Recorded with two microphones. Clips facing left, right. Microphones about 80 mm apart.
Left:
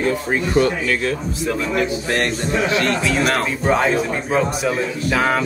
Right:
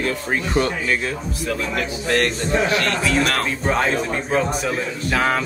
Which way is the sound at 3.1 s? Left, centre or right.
Centre.